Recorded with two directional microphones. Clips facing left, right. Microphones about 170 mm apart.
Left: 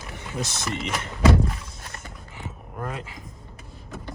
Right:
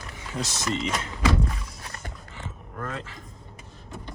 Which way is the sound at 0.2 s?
60° left (ahead or behind).